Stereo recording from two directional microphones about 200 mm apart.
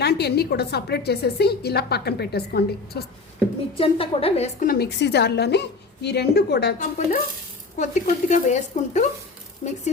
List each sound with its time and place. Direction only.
0.0 s a woman's voice: 55° left (ahead or behind)
3.8 s a woman's voice: 25° left (ahead or behind)
4.7 s a woman's voice: 55° left (ahead or behind)
6.7 s a woman's voice: 45° left (ahead or behind)